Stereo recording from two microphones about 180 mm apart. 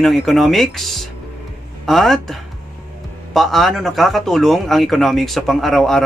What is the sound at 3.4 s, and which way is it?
Speech, centre (ahead or behind).